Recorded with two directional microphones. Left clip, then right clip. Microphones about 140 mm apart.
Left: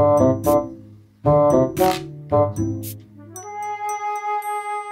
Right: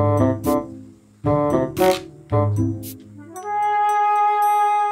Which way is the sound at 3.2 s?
5° right (ahead or behind).